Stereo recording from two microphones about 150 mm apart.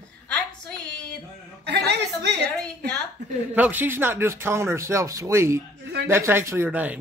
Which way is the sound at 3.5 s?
10° right (ahead or behind).